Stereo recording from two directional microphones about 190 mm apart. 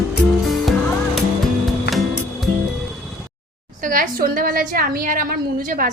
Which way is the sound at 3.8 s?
50° right (ahead or behind).